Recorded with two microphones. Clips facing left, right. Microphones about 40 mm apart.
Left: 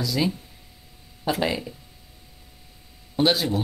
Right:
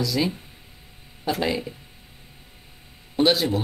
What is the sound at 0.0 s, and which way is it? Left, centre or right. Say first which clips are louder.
Speech: right 1 dB; centre.